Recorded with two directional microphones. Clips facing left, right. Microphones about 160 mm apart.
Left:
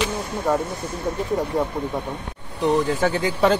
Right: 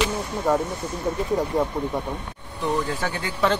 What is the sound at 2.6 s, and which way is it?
Speech, 15° left (ahead or behind).